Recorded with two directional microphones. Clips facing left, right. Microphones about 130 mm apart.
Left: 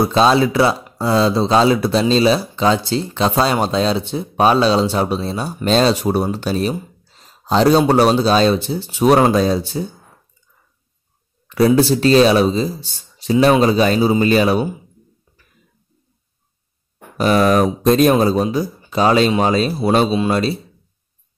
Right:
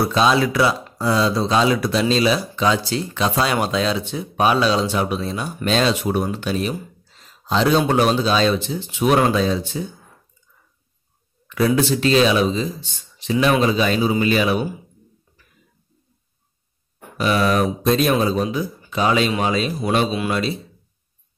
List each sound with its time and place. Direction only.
0.0 s speech: 30° left (ahead or behind)
6.7 s a sound: 35° left (ahead or behind)
7.9 s speech: 35° left (ahead or behind)
11.4 s speech: 35° left (ahead or behind)
17.2 s speech: 40° left (ahead or behind)